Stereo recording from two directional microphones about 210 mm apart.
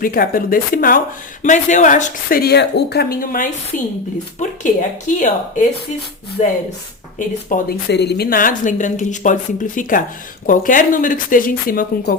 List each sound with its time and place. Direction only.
0.0 s a woman's voice: 45° left (ahead or behind)
7.5 s a woman's voice: 50° left (ahead or behind)